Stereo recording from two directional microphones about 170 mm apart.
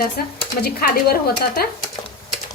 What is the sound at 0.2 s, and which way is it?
Speech, 65° left (ahead or behind).